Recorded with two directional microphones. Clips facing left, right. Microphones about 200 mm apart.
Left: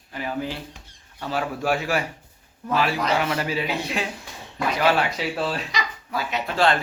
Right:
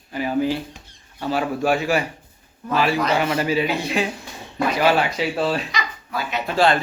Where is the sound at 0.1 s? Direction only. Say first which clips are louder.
Right 7 dB; 5° right (ahead or behind).